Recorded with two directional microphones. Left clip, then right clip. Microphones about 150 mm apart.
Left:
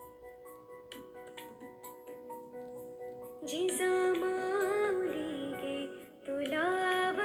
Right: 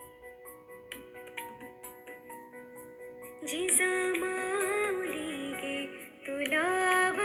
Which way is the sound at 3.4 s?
15° right (ahead or behind).